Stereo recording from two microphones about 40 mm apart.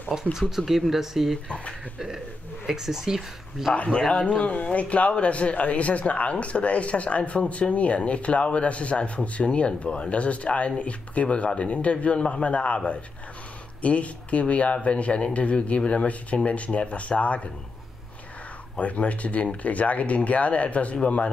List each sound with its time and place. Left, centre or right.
0.1 s speech: centre
1.5 s speech: left
2.0 s speech: centre
3.7 s speech: left
4.5 s speech: left
18.8 s speech: left